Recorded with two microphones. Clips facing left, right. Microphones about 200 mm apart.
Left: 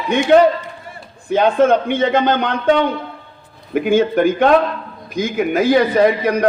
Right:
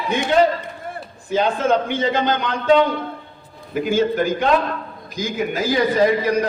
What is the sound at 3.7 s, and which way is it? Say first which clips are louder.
A man's voice: left 4 dB; 60° left (ahead or behind).